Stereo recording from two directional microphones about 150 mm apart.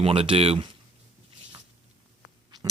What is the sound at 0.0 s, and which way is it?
Speech, 40° right (ahead or behind).